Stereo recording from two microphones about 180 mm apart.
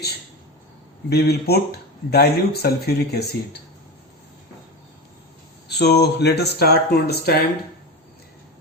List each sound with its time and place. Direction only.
1.1 s speech: 65° left (ahead or behind)
5.6 s speech: 65° left (ahead or behind)